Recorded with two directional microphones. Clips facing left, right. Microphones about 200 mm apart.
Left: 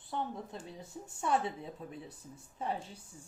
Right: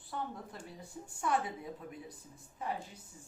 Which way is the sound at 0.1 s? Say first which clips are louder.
Left 3 dB; 25° left (ahead or behind).